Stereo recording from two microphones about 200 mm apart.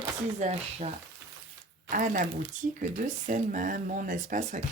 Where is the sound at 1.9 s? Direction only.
40° right (ahead or behind).